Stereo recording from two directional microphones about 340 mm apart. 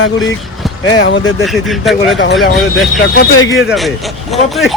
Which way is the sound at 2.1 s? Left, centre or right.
Left.